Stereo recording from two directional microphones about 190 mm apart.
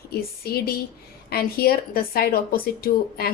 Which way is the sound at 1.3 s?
55° left (ahead or behind).